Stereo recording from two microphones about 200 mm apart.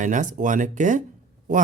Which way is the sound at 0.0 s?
40° right (ahead or behind).